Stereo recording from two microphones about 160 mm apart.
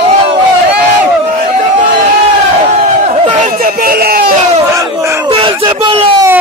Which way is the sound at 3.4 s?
60° right (ahead or behind).